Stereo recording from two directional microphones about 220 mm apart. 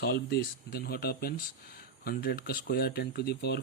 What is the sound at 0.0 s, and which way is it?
Speech, 50° left (ahead or behind).